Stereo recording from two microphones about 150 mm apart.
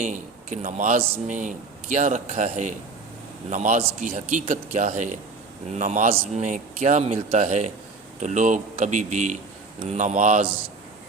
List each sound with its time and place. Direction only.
0.0 s speech: 55° right (ahead or behind)